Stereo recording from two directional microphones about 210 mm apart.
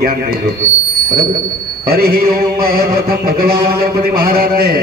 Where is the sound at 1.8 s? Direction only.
45° right (ahead or behind).